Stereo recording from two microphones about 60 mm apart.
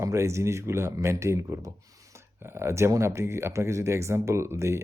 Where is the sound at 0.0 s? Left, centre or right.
Right.